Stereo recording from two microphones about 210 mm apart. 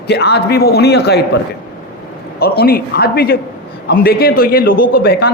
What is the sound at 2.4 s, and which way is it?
A man's voice, 50° left (ahead or behind).